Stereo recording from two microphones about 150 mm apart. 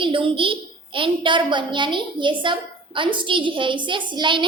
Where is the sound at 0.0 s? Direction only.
35° right (ahead or behind).